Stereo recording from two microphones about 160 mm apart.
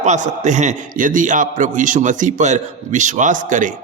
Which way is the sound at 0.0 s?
50° right (ahead or behind).